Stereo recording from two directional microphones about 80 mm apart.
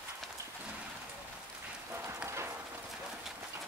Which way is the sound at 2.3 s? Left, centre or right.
Right.